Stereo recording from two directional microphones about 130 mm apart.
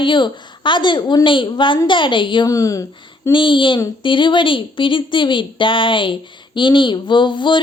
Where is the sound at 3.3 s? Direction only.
40° left (ahead or behind).